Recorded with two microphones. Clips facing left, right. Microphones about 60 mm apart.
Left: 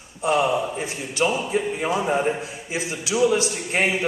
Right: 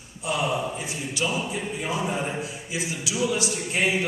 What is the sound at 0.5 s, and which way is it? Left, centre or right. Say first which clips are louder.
Speech: left 3 dB; centre.